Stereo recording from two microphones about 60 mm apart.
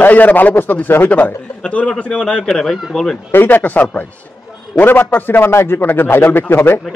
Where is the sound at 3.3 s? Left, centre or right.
Left.